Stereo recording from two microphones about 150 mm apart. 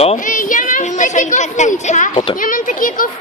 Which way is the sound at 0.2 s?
60° left (ahead or behind).